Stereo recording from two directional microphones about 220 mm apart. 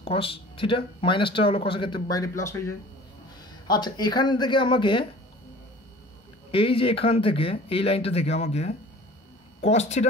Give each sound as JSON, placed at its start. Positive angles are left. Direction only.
{"t": 0.0, "sound": "speech", "side_deg": 25}
{"t": 6.5, "sound": "speech", "side_deg": 25}